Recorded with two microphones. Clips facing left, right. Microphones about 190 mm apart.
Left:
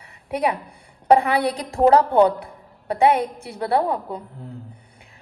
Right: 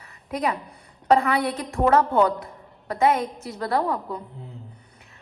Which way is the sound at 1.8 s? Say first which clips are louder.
Left 4 dB; 30° left (ahead or behind).